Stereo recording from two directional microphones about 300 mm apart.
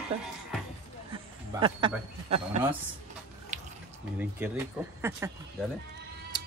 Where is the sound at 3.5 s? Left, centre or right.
Right.